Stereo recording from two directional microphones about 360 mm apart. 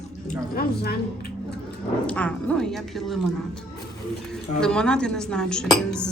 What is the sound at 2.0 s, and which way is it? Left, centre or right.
Dishes, centre.